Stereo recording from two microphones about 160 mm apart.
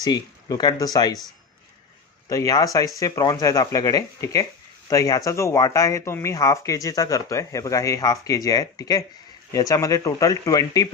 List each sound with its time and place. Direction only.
0.0 s speech: 25° left (ahead or behind)
2.3 s speech: 20° left (ahead or behind)